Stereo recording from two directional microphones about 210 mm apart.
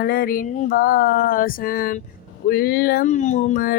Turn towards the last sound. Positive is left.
turn(degrees=40)  # may be behind; listen again after turning